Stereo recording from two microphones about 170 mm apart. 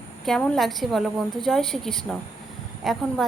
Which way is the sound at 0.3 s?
5° left (ahead or behind).